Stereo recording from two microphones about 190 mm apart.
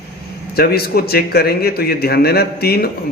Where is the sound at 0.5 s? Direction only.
55° left (ahead or behind).